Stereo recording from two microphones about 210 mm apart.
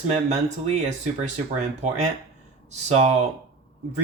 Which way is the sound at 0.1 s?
35° right (ahead or behind).